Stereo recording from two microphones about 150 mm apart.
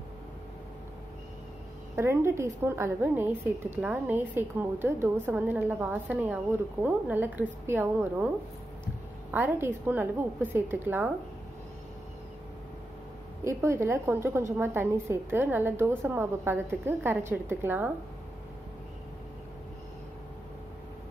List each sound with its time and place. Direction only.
2.0 s a woman's voice: 15° right (ahead or behind)
9.3 s a woman's voice: 10° right (ahead or behind)
13.4 s a woman's voice: 15° right (ahead or behind)